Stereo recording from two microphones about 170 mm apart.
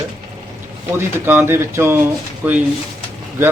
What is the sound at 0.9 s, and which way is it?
A man's voice, 10° right (ahead or behind).